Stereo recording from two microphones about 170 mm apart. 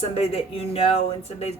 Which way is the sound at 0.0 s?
35° left (ahead or behind).